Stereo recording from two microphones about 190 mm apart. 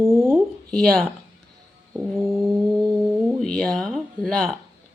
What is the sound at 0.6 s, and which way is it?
Speech, 5° left (ahead or behind).